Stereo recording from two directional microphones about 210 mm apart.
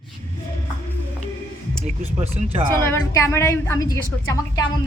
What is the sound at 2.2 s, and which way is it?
Speech, 30° right (ahead or behind).